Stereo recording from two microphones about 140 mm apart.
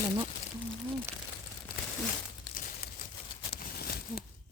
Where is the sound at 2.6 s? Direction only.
90° left.